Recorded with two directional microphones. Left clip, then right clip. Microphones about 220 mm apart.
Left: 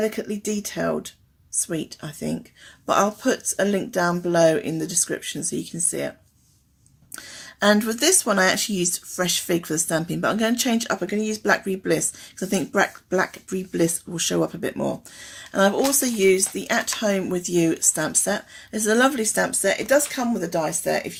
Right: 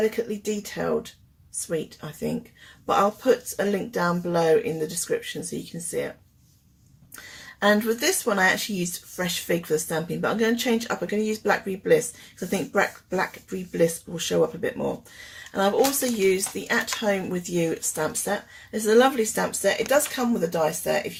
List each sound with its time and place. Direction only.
0.0 s speech: 45° left (ahead or behind)
7.2 s speech: 45° left (ahead or behind)